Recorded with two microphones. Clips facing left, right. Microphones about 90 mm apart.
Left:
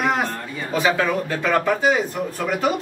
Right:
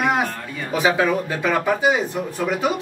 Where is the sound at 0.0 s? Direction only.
5° right (ahead or behind).